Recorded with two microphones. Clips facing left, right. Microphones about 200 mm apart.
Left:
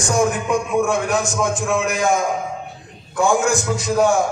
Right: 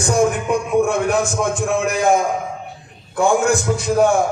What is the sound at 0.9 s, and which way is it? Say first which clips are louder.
A man's voice: right 2 dB; 55° right (ahead or behind).